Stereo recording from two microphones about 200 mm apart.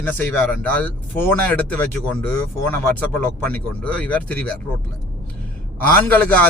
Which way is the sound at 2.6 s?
10° left (ahead or behind).